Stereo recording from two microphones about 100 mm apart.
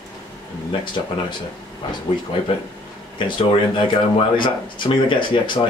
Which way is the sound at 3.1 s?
60° left (ahead or behind).